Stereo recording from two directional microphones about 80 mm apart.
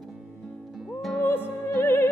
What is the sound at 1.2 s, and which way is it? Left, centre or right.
Music, left.